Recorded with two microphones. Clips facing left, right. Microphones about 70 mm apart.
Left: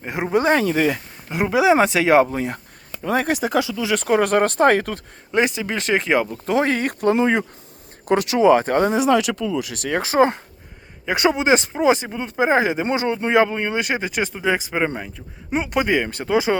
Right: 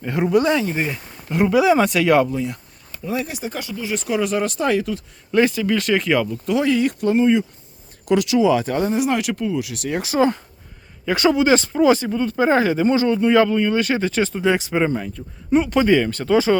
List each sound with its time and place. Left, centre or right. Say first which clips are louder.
0.1 s speech: right 2 dB; left
0.6 s speech: left 4 dB; left
1.3 s speech: right 1 dB; centre
2.3 s speech: even; left
3.0 s speech: left 5 dB; left
3.9 s speech: left 4 dB; left
5.3 s speech: right 3 dB; left
6.3 s speech: right 1 dB; left
8.0 s speech: left 1 dB; left
9.9 s speech: left 2 dB; left
11.0 s speech: right 2 dB; centre